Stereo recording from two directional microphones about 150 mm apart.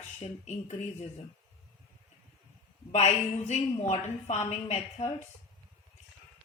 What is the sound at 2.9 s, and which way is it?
A woman's voice, 45° left (ahead or behind).